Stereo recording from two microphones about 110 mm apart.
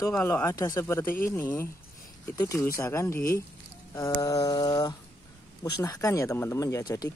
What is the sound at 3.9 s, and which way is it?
Mantra, 30° left (ahead or behind).